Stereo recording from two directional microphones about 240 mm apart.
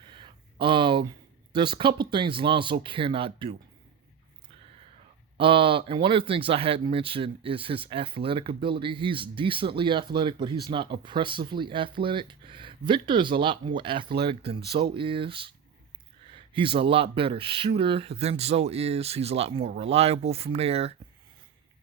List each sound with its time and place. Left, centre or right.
0.1 s a sound: centre
1.5 s speech: centre
5.4 s speech: right
16.6 s speech: right